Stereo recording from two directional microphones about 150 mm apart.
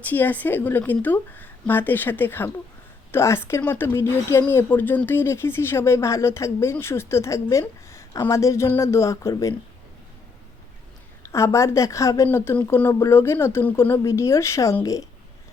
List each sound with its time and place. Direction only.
0.0 s speech: 10° left (ahead or behind)
11.2 s a woman's voice: 20° left (ahead or behind)